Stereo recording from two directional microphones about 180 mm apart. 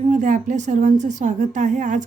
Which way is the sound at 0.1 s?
45° right (ahead or behind).